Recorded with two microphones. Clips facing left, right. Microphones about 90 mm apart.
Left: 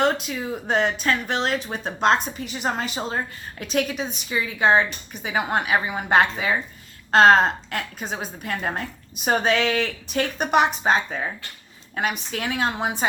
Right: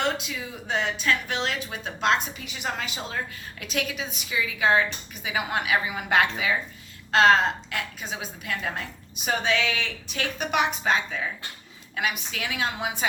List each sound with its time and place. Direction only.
0.0 s a woman's voice: 45° left (ahead or behind)